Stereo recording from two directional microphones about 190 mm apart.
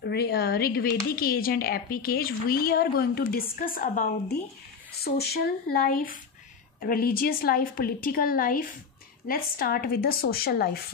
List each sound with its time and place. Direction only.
0.0 s speech: 60° left (ahead or behind)